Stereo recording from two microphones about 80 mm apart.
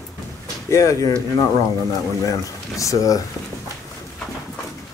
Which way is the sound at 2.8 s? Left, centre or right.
Left.